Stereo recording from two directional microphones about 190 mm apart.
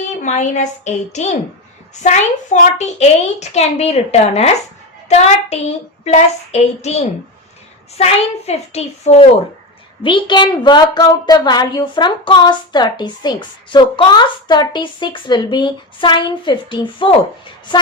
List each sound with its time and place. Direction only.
0.2 s a child's voice: 40° left (ahead or behind)